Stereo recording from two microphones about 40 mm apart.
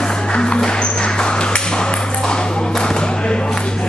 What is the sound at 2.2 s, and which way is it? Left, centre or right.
Thump, left.